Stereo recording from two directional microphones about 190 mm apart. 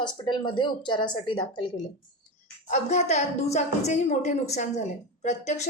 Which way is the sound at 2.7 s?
35° left (ahead or behind).